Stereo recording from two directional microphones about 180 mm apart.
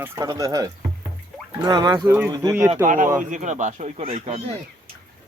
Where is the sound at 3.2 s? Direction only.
45° right (ahead or behind).